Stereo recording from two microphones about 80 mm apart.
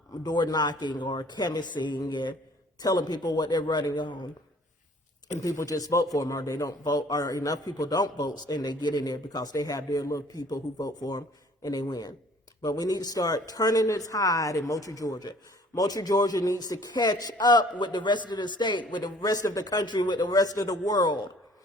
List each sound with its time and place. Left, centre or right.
0.2 s a man's voice: left
2.8 s a man's voice: left
5.4 s a man's voice: left
19.2 s a man's voice: left